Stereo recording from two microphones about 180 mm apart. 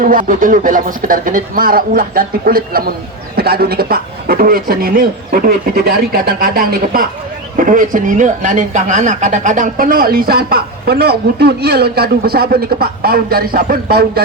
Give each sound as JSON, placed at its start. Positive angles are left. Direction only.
{"t": 0.0, "sound": "a man's voice", "side_deg": -50}